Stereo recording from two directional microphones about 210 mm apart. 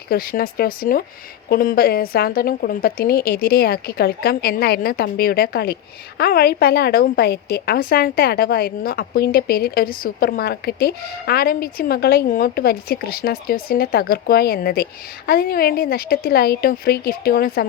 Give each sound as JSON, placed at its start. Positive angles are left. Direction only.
{"t": 0.1, "sound": "a woman's voice", "side_deg": 45}